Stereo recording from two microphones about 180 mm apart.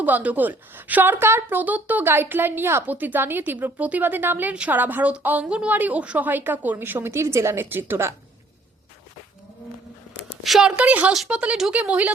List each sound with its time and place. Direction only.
0.0 s a woman's voice: 10° right (ahead or behind)
10.4 s a woman's voice: centre (ahead or behind)